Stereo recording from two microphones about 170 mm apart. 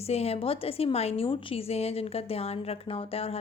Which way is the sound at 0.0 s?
35° left (ahead or behind).